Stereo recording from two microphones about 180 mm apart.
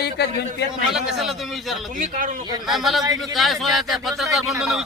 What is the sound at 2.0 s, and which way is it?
Speech, 45° right (ahead or behind).